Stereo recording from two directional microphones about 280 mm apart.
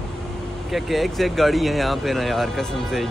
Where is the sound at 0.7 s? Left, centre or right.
Centre.